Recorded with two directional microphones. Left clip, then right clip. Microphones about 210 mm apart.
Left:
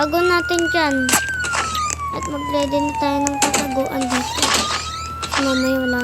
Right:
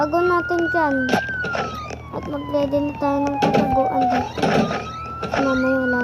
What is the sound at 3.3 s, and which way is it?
Speech, 65° left (ahead or behind).